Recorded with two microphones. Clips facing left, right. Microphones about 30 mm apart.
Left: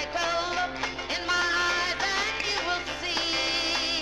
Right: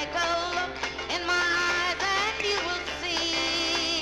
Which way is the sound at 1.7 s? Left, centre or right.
Left.